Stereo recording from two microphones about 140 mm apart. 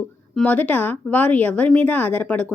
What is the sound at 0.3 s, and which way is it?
A woman's voice, 10° left (ahead or behind).